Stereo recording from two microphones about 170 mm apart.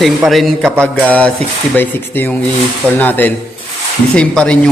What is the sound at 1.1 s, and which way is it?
A man's voice, 5° left (ahead or behind).